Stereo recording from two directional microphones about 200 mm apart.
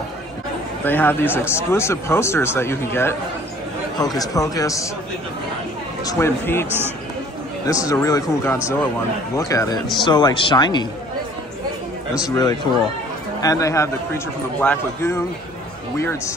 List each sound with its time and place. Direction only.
0.8 s speech: 10° left (ahead or behind)
6.0 s speech: 15° left (ahead or behind)
12.2 s speech: 20° left (ahead or behind)